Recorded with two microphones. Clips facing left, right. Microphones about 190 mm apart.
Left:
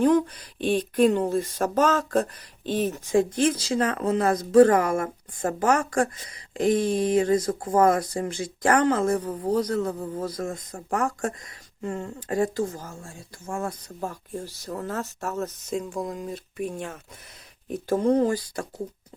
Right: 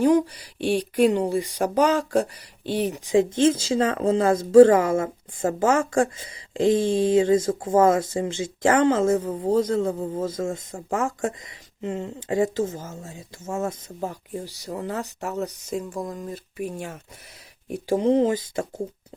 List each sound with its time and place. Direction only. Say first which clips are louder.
0.0 s speech: right 1 dB; 10° right (ahead or behind)